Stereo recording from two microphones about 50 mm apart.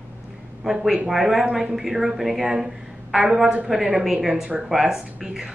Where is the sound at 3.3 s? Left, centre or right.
Centre.